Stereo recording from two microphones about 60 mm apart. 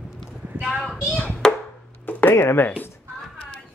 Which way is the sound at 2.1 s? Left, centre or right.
Left.